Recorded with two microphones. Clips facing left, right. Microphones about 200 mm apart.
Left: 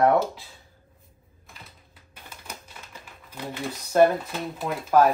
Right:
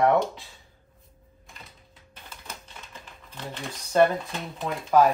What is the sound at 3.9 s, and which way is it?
Speech, 5° left (ahead or behind).